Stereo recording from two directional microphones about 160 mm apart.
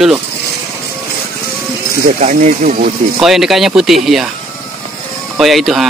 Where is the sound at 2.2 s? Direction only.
50° right (ahead or behind).